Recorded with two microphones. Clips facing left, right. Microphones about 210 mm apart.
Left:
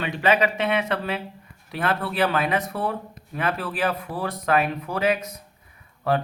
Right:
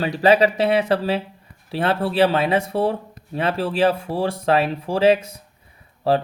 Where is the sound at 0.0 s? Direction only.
35° right (ahead or behind).